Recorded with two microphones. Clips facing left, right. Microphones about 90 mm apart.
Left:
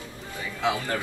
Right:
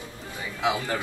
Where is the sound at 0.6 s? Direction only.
15° right (ahead or behind).